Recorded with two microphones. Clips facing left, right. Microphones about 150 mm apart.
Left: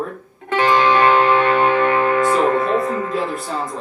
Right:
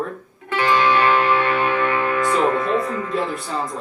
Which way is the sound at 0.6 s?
15° left (ahead or behind).